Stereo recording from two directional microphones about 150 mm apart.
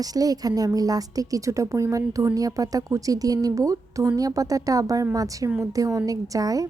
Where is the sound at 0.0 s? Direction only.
25° right (ahead or behind).